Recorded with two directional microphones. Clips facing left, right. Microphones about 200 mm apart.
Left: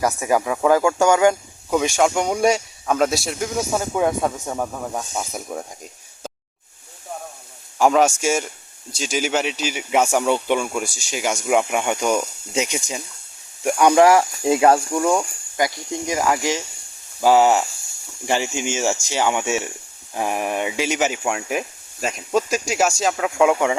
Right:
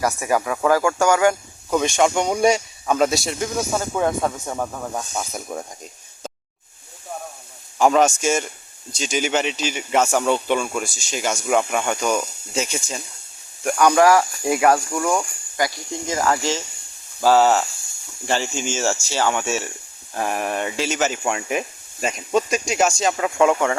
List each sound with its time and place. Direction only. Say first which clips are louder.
0.0 s speech: left 1 dB; 15° left (ahead or behind)
1.7 s a man's voice: even; 5° left (ahead or behind)
7.8 s a man's voice: even; 5° left (ahead or behind)